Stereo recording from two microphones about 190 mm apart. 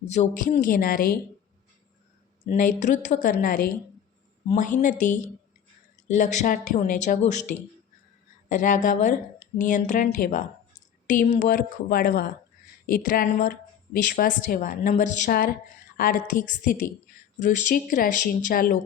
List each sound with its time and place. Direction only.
0.1 s speech: 35° left (ahead or behind)
2.5 s speech: 45° left (ahead or behind)
8.4 s speech: 45° left (ahead or behind)